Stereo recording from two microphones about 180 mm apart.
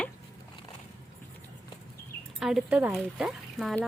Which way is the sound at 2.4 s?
Centre (ahead or behind).